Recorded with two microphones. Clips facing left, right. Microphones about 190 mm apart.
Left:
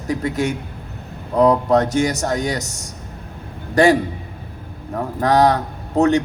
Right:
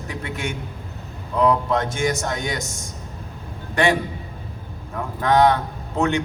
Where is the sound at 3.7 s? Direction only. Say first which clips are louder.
Left 6 dB; 40° left (ahead or behind).